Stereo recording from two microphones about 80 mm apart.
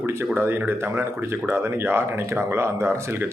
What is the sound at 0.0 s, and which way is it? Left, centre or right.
Speech, right.